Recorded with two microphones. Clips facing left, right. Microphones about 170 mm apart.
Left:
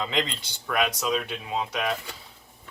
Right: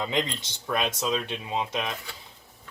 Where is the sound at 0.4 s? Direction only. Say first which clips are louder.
Left 2 dB; 25° right (ahead or behind).